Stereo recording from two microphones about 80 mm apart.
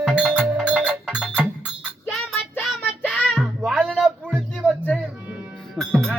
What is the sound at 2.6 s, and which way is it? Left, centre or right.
Child singing, centre.